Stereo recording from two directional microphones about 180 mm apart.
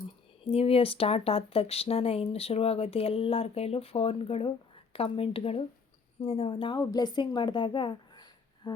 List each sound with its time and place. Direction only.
0.0 s speech: 30° left (ahead or behind)